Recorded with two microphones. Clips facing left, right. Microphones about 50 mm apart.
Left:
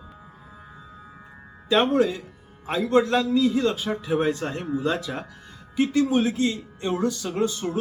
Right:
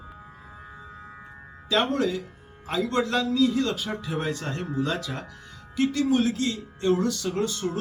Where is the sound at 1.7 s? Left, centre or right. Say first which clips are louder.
Left 4 dB; centre.